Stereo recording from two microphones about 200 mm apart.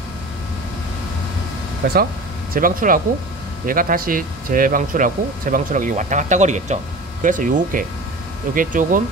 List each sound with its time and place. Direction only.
1.8 s speech: 55° right (ahead or behind)
2.5 s speech: 45° right (ahead or behind)